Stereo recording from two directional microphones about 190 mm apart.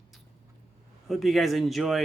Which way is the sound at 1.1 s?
Centre (ahead or behind).